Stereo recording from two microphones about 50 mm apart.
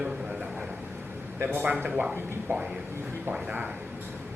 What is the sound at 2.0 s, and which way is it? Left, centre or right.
Speech, centre.